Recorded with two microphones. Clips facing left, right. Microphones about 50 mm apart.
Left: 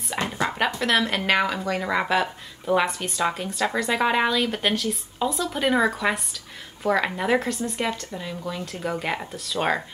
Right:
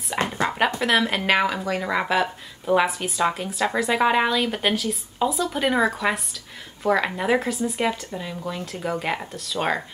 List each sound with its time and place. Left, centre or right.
0.4 s dog: centre
0.7 s speech: centre